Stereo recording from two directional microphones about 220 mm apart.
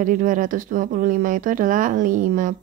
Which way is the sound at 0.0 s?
35° right (ahead or behind).